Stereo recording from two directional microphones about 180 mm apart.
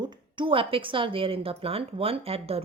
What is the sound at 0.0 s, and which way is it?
Speech, 25° right (ahead or behind).